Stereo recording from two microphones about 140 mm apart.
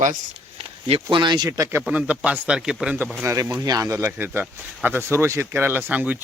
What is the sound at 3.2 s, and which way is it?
Speech, 20° right (ahead or behind).